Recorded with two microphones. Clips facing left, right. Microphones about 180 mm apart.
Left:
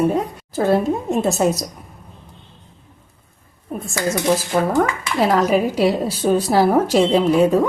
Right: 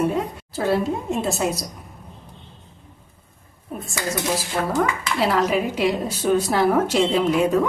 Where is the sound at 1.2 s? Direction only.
45° left (ahead or behind).